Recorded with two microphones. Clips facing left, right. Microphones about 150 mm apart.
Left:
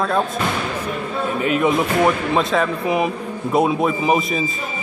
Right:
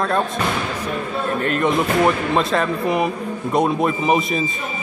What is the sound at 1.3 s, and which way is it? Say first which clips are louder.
Speech: left 1 dB; 5° left (ahead or behind).